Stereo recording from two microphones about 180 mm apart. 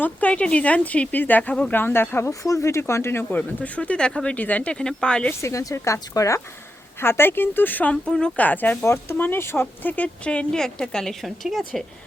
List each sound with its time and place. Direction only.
0.0 s speech: 10° left (ahead or behind)
5.4 s speech: 15° left (ahead or behind); by 11.8 s centre (ahead or behind)